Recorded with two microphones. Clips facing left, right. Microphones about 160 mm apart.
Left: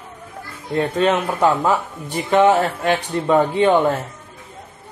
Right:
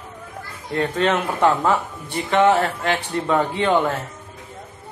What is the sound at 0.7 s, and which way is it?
Speech, 20° left (ahead or behind).